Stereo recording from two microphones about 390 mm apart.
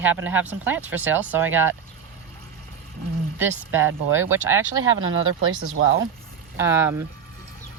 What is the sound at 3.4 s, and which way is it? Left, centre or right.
Speech, centre.